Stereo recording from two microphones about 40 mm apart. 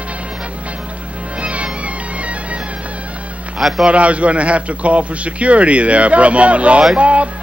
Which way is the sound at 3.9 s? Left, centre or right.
Right.